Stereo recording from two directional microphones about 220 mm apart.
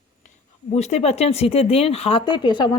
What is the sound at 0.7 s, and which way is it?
Speech, 30° left (ahead or behind).